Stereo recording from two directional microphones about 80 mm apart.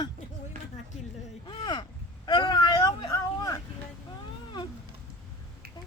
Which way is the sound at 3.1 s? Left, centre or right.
Left.